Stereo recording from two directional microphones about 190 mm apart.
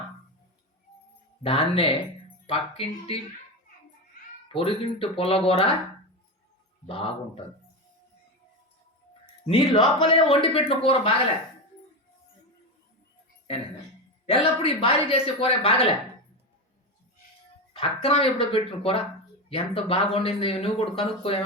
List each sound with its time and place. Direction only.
1.4 s speech: 30° left (ahead or behind)
4.4 s speech: 30° left (ahead or behind)
6.8 s speech: 30° left (ahead or behind)
9.5 s speech: 30° left (ahead or behind)
14.3 s speech: 30° left (ahead or behind)
17.7 s speech: 30° left (ahead or behind)